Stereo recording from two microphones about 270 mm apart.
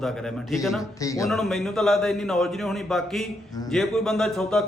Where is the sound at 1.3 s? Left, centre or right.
Centre.